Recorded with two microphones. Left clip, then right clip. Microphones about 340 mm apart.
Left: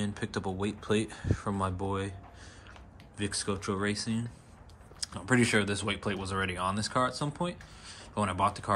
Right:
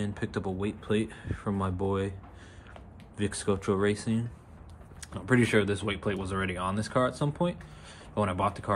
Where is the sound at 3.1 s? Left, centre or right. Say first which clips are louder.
Right 3 dB; centre.